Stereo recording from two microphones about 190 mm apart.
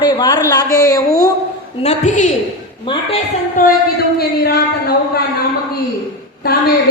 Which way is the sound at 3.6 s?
45° left (ahead or behind).